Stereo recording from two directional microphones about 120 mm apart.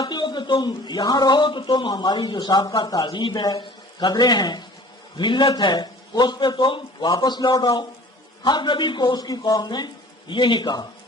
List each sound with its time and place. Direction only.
0.0 s a man's voice: 35° left (ahead or behind)